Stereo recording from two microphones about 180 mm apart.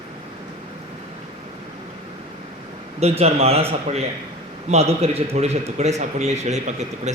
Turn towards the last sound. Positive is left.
turn(degrees=-40)  # may be behind; listen again after turning